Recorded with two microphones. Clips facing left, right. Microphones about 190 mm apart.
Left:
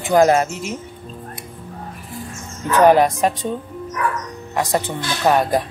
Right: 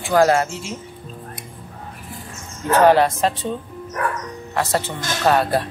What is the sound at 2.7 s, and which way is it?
Speech, 15° left (ahead or behind).